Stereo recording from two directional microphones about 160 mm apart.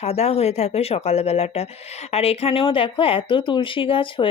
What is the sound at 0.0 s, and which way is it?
Speech, 40° left (ahead or behind).